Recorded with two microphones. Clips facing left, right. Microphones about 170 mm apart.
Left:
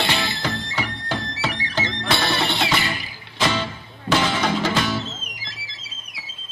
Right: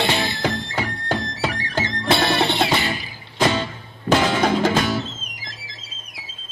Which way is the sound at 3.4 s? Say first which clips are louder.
Right 3 dB; 50° right (ahead or behind).